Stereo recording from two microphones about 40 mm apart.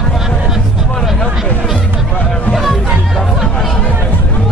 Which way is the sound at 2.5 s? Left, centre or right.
Centre.